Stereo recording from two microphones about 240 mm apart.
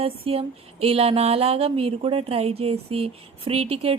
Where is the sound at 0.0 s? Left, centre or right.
Right.